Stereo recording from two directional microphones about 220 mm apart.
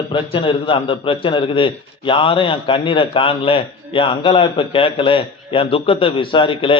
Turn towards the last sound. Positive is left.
turn(degrees=25)  # may be behind; listen again after turning